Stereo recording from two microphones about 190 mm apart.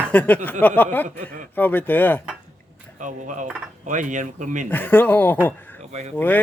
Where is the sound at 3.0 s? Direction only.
40° right (ahead or behind).